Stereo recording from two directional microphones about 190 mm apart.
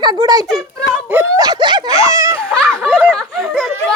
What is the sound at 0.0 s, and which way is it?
Speech, 25° right (ahead or behind).